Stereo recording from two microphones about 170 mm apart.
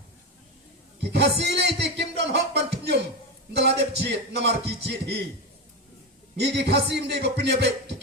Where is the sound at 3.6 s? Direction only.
75° right (ahead or behind).